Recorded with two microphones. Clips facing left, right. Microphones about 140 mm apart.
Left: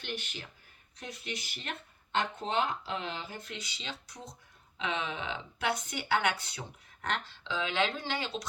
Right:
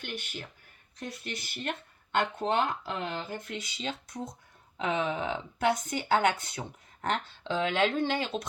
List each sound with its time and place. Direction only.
0.0 s speech: 50° right (ahead or behind)